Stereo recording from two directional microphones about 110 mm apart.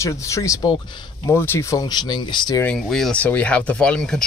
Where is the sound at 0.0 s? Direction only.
30° left (ahead or behind).